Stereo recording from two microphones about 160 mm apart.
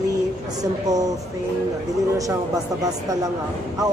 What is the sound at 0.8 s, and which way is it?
Speech, 25° right (ahead or behind).